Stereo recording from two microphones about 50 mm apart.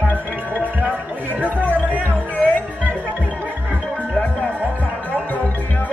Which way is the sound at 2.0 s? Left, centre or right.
Left.